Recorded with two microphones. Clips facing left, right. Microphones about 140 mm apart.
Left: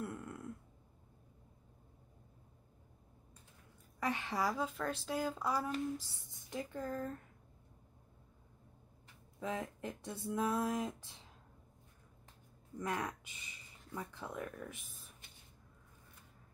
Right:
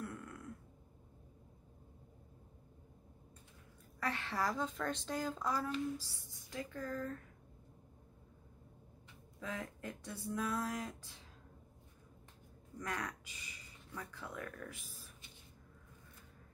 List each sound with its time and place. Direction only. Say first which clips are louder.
0.0 s a sound: left 3 dB; 25° left (ahead or behind)
4.0 s speech: left 2 dB; 15° left (ahead or behind)
5.9 s speech: left 1 dB; 20° left (ahead or behind)
9.4 s speech: left 4 dB; 20° left (ahead or behind)
12.7 s speech: left 3 dB; 25° left (ahead or behind)